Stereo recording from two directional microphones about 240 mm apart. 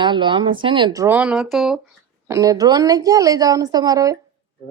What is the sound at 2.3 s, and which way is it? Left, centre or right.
Speech, centre.